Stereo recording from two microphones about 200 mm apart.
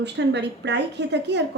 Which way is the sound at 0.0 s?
60° right (ahead or behind).